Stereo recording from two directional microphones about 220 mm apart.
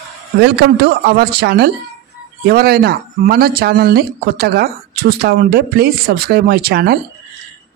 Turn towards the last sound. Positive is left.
turn(degrees=-45)  # may be behind; listen again after turning